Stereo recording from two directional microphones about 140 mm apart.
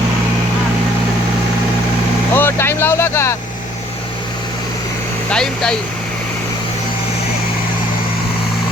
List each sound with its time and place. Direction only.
2.3 s vehicle: 15° left (ahead or behind)
5.3 s speech: 5° left (ahead or behind)